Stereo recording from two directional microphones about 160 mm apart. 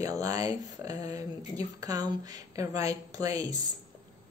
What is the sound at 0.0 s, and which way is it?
A woman's voice, 20° right (ahead or behind).